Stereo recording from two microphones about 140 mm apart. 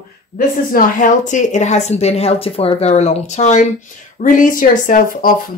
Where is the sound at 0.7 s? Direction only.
65° left (ahead or behind).